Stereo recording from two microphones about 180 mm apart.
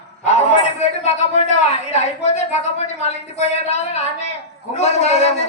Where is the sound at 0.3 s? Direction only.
35° left (ahead or behind).